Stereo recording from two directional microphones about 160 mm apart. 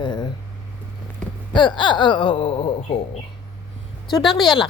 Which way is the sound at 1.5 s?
30° left (ahead or behind).